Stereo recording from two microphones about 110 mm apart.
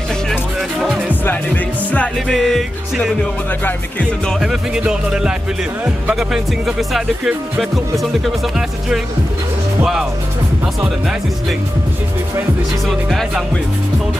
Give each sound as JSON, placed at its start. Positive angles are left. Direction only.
{"t": 0.3, "sound": "speech", "side_deg": 0}
{"t": 1.2, "sound": "music", "side_deg": 15}
{"t": 2.2, "sound": "speech", "side_deg": 0}
{"t": 3.6, "sound": "music", "side_deg": 10}
{"t": 4.4, "sound": "speech", "side_deg": -5}
{"t": 12.8, "sound": "speech", "side_deg": 0}